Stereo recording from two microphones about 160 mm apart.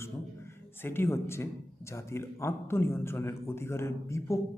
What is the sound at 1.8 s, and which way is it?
A man's voice, 15° left (ahead or behind).